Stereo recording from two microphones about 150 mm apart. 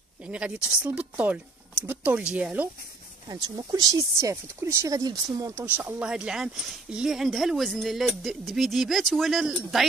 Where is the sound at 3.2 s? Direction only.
25° right (ahead or behind).